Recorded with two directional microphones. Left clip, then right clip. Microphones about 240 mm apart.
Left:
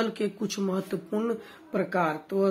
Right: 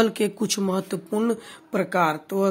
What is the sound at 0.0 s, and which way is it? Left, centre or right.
Speech, right.